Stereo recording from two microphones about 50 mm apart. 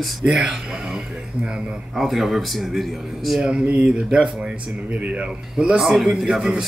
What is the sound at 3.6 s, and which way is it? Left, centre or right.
Speech, right.